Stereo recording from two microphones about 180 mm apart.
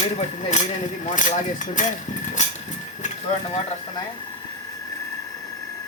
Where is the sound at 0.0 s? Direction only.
40° left (ahead or behind).